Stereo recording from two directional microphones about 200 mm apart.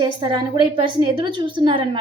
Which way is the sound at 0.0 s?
20° right (ahead or behind).